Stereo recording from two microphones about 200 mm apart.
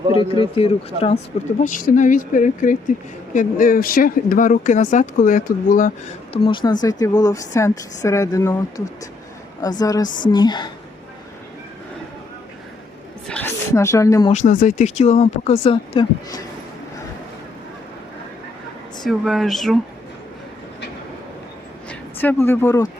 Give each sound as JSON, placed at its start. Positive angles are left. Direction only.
{"t": 0.1, "sound": "speech", "side_deg": 25}
{"t": 1.6, "sound": "speech", "side_deg": 40}
{"t": 6.3, "sound": "speech", "side_deg": 25}
{"t": 13.2, "sound": "a sound", "side_deg": 10}
{"t": 14.3, "sound": "speech", "side_deg": 40}
{"t": 19.0, "sound": "speech", "side_deg": 0}
{"t": 21.8, "sound": "speech", "side_deg": 10}